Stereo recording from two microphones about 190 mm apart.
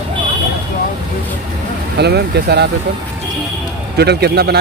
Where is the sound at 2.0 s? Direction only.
60° right (ahead or behind).